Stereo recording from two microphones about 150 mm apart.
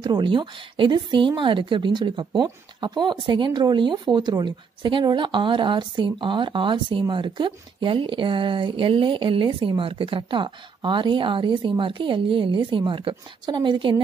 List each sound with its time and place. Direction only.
0.0 s a woman's voice: 30° right (ahead or behind)